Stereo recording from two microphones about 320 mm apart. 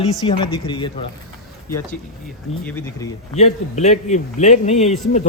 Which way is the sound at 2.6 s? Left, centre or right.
Centre.